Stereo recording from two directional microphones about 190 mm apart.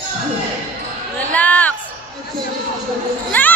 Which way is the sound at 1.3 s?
10° left (ahead or behind).